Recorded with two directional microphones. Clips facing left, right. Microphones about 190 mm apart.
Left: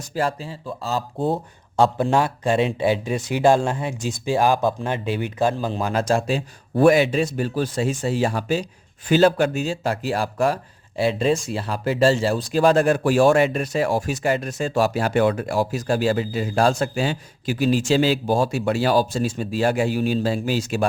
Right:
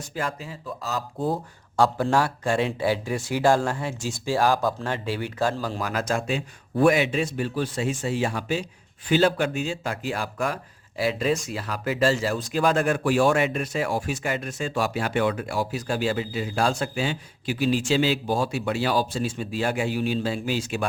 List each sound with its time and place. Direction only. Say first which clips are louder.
0.1 s speech: left 7 dB; 35° left (ahead or behind)